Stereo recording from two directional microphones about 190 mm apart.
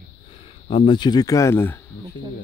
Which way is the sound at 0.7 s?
25° left (ahead or behind).